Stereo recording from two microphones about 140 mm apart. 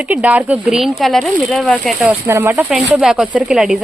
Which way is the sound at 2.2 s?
20° right (ahead or behind).